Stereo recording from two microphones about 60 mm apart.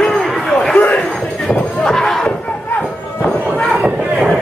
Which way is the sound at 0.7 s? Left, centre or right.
Left.